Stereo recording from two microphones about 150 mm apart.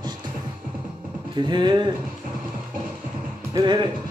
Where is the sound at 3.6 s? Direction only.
30° right (ahead or behind).